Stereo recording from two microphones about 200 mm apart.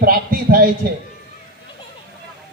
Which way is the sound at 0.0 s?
50° right (ahead or behind).